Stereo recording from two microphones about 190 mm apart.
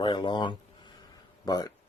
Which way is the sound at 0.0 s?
25° left (ahead or behind).